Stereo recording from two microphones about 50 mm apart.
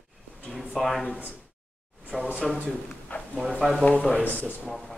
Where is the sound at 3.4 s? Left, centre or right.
Centre.